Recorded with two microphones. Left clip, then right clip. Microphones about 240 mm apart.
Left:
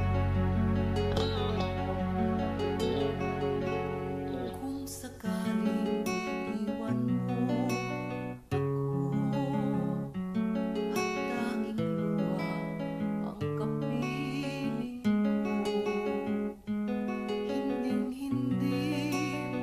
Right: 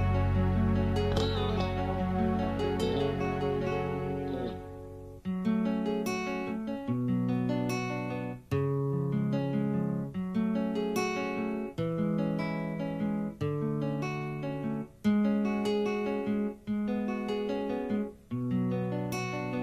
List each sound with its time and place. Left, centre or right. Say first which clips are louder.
0.4 s music: right 1 dB; right
2.6 s music: right 1 dB; right
5.5 s music: right 1 dB; right
6.9 s music: right 3 dB; right
9.1 s music: even; right
10.3 s guitar: right 1 dB; right
12.0 s music: even; right
15.0 s guitar: right 2 dB; right